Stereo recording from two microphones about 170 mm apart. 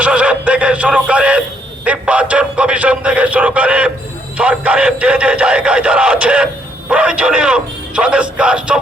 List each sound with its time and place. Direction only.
0.0 s music: 5° right (ahead or behind)
1.8 s speech: 10° right (ahead or behind)